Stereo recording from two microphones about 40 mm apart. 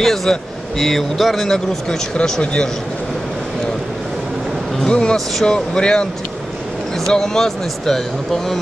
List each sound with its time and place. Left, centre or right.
0.0 s speech: centre
1.5 s speech: centre
4.8 s speech: left
5.1 s speech: centre
5.8 s speech: left
7.1 s speech: centre